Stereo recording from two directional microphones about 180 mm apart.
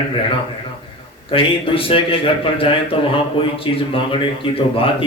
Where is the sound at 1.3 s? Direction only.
30° left (ahead or behind).